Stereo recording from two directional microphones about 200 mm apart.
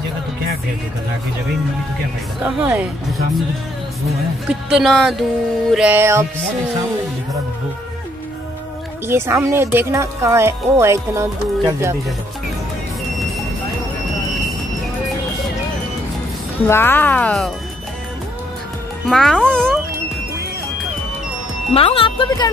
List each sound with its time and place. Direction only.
2.4 s speech: 5° right (ahead or behind)
4.5 s speech: 5° right (ahead or behind)
9.0 s speech: 10° right (ahead or behind)
16.6 s speech: 10° left (ahead or behind)
19.0 s speech: 5° left (ahead or behind)
21.7 s speech: 30° left (ahead or behind)